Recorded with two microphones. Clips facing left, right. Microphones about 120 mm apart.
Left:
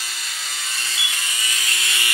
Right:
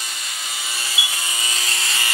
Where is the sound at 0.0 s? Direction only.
Centre (ahead or behind).